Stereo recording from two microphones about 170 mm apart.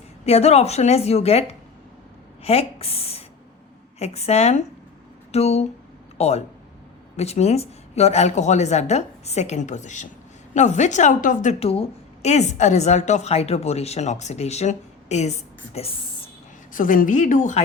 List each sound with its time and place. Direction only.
0.3 s a woman's voice: 40° left (ahead or behind)
11.6 s a woman's voice: 35° left (ahead or behind)
16.7 s a woman's voice: 50° left (ahead or behind)